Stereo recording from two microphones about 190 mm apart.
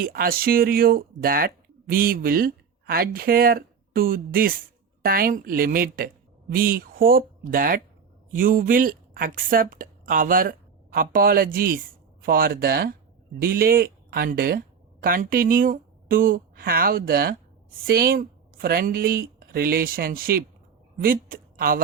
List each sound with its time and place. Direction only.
0.0 s speech: 50° right (ahead or behind)